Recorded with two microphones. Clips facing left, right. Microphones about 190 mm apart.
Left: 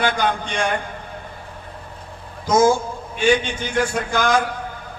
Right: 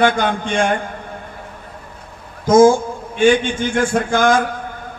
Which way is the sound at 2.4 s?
50° right (ahead or behind).